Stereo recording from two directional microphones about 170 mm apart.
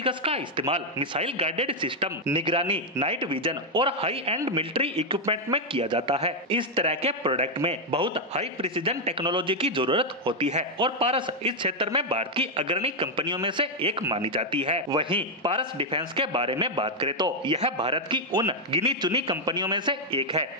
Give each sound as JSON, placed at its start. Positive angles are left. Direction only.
{"t": 0.0, "sound": "a man's voice", "side_deg": -30}